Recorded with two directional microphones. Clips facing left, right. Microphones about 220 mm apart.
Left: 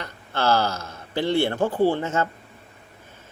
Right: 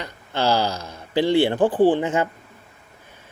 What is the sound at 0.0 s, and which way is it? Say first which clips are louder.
Speech: right 2 dB; 15° right (ahead or behind).